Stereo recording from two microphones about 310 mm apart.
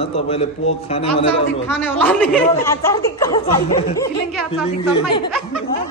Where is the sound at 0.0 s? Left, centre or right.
Centre.